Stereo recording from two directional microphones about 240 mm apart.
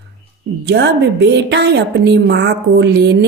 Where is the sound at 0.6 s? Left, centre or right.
Right.